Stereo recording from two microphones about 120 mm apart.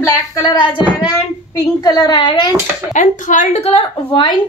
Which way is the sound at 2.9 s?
90° left.